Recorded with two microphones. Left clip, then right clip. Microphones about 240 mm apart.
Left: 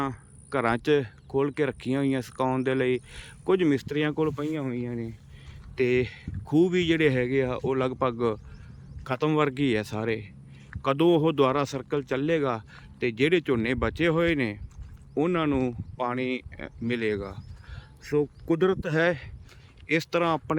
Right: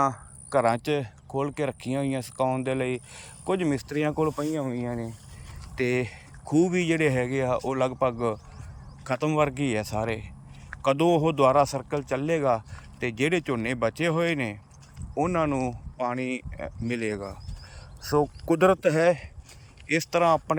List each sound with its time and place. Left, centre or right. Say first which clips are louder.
0.5 s speech: right 1 dB; centre
5.7 s speech: left 2 dB; centre
18.4 s speech: right 4 dB; centre